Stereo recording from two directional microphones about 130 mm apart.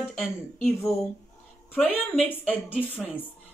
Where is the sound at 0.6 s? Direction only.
20° left (ahead or behind).